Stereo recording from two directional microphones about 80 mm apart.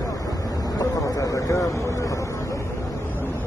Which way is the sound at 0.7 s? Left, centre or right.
Left.